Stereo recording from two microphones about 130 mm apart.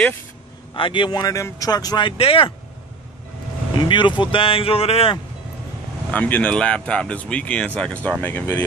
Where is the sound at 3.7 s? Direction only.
35° left (ahead or behind).